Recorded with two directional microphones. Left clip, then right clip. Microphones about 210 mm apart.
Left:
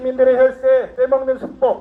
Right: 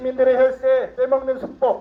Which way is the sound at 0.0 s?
25° right (ahead or behind).